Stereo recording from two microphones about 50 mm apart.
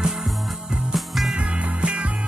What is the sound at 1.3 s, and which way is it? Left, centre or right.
Music, right.